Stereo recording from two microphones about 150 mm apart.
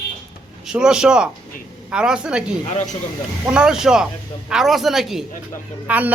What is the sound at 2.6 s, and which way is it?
Speech, 55° left (ahead or behind).